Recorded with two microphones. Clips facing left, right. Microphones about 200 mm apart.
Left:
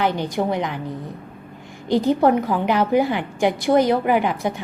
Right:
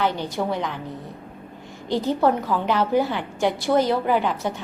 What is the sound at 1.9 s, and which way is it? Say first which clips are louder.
A woman's voice: left 4 dB; 15° left (ahead or behind).